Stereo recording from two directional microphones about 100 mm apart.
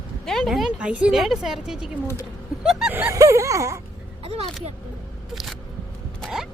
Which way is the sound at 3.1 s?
30° right (ahead or behind).